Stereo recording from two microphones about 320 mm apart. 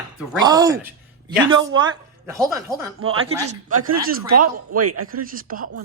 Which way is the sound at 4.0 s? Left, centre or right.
Right.